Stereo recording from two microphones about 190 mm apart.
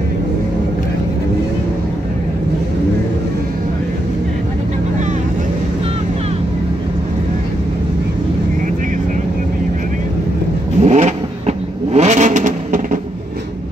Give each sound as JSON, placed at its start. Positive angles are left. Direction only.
{"t": 10.8, "sound": "vehicle", "side_deg": -35}